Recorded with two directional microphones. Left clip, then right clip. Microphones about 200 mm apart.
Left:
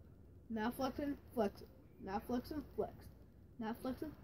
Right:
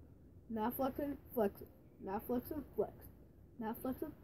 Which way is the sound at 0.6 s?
5° left (ahead or behind).